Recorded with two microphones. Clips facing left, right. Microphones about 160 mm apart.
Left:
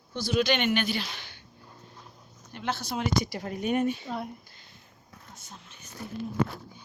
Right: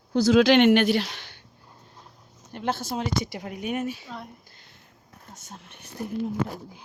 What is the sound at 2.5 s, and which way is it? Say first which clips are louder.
Speech: right 4 dB; 50° right (ahead or behind).